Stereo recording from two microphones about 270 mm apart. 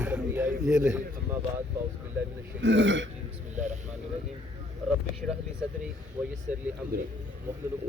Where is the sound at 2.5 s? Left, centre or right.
Right.